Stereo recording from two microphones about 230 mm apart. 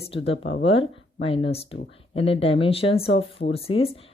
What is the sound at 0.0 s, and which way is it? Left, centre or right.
Speech, left.